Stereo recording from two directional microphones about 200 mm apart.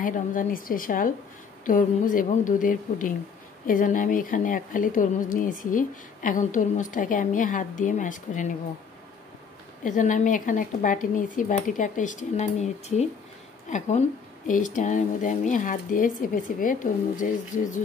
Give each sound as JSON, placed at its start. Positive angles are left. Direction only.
{"t": 0.0, "sound": "speech", "side_deg": 40}
{"t": 9.8, "sound": "speech", "side_deg": 40}